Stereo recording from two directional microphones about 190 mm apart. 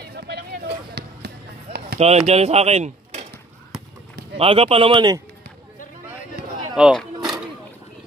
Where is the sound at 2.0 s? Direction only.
35° right (ahead or behind).